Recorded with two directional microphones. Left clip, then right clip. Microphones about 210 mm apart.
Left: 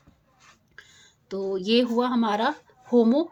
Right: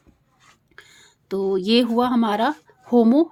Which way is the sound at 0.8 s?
30° right (ahead or behind).